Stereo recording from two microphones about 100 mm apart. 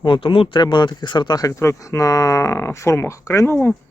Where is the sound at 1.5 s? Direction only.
30° left (ahead or behind).